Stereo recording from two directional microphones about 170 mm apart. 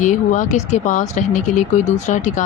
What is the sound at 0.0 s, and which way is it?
A woman's voice, 45° left (ahead or behind).